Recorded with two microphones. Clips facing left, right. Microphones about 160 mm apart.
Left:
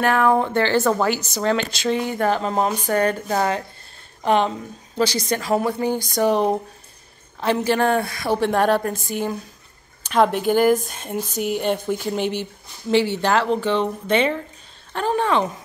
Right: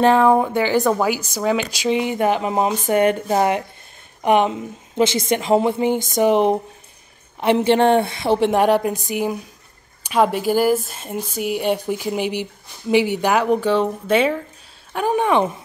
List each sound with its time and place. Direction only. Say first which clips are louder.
0.0 s a woman's voice: right 4 dB; 20° right (ahead or behind)